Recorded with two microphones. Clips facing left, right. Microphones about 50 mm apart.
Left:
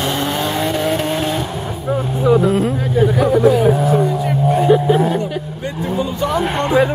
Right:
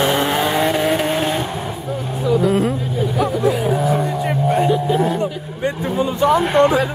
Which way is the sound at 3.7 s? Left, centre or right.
Centre.